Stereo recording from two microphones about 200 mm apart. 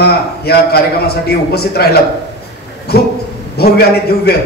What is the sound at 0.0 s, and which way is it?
A man's voice, 50° left (ahead or behind).